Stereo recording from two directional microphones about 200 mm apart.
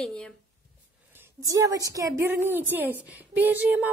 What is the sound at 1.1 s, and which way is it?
A woman's voice, 15° right (ahead or behind).